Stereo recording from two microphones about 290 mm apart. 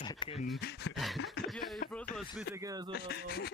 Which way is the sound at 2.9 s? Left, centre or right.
Left.